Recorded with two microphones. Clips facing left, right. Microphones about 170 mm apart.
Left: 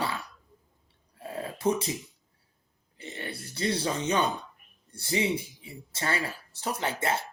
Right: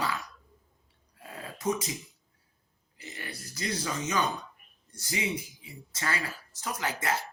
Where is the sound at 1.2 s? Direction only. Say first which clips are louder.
Left 7 dB; 30° left (ahead or behind).